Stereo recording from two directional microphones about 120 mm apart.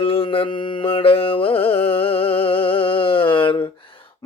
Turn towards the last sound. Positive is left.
turn(degrees=45)  # may be behind; listen again after turning